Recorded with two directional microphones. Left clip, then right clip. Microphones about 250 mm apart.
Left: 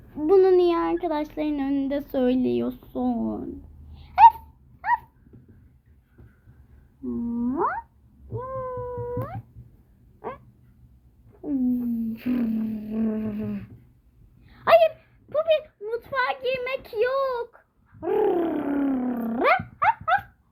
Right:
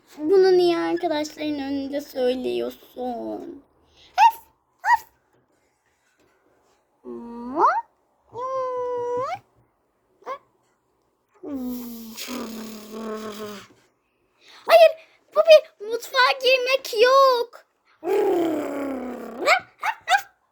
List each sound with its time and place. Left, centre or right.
0.3 s speech: right
3.9 s sneeze: right
4.8 s dog: right
7.3 s a sound: right
8.4 s cat: right
12.1 s music: right
14.4 s a sound: right
16.6 s a child's voice: right